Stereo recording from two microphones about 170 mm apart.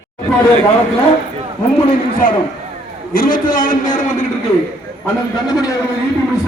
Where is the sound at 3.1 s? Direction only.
55° left (ahead or behind).